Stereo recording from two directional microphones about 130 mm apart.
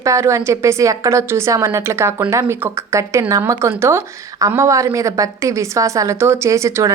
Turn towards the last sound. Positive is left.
turn(degrees=-25)  # may be behind; listen again after turning